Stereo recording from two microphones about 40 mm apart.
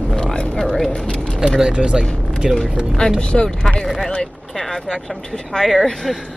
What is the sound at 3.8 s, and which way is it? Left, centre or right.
Speech, centre.